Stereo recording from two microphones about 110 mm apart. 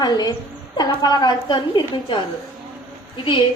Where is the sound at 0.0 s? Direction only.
40° left (ahead or behind).